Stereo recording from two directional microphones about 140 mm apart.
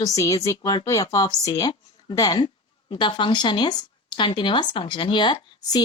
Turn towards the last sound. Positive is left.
turn(degrees=30)  # may be behind; listen again after turning